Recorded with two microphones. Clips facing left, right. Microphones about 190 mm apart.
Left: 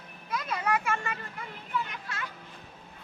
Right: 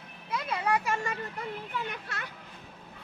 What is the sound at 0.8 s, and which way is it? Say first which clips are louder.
Vehicle: right 1 dB; 40° right (ahead or behind).